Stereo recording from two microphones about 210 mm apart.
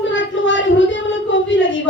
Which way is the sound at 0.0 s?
60° left (ahead or behind).